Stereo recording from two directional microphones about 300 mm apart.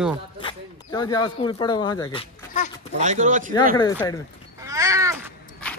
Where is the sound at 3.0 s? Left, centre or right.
Right.